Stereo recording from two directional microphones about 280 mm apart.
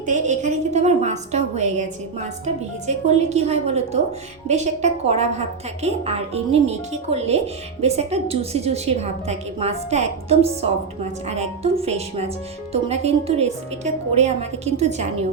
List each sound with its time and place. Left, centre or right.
0.0 s a woman's voice: right
2.8 s a woman's voice: right